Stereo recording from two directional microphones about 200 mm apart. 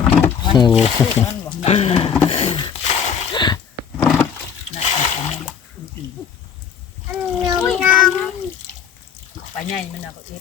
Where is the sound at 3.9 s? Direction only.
5° left (ahead or behind).